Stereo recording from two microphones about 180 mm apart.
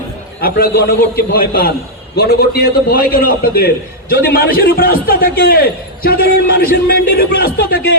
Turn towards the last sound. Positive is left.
turn(degrees=55)  # may be behind; listen again after turning